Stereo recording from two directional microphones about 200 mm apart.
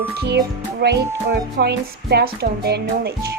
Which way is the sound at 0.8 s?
55° right (ahead or behind).